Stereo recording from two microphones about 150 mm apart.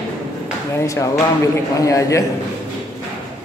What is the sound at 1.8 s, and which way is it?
Speech, 20° left (ahead or behind).